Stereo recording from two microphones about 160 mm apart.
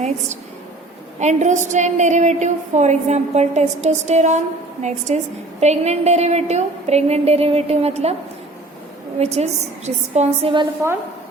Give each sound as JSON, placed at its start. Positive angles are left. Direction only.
{"t": 1.2, "sound": "a woman's voice", "side_deg": -45}
{"t": 9.1, "sound": "a woman's voice", "side_deg": -40}
{"t": 10.8, "sound": "a woman's voice", "side_deg": -15}